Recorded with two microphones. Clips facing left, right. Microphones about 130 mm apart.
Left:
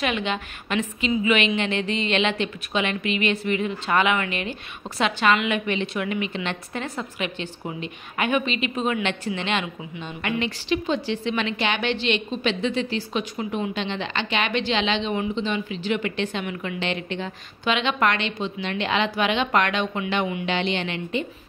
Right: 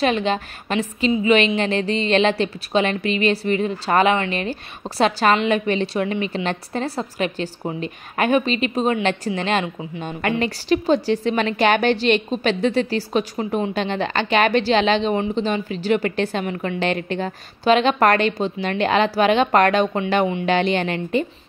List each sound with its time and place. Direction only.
0.0 s a woman's voice: 35° right (ahead or behind)